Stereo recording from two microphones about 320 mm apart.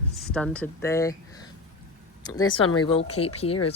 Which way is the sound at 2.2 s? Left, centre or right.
Centre.